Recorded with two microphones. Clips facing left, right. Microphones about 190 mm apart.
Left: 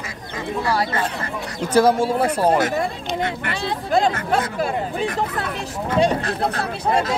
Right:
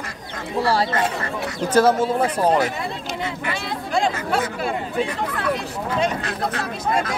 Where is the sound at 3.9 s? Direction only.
40° left (ahead or behind).